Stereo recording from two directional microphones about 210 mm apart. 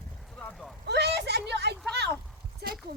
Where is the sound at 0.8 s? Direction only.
50° right (ahead or behind).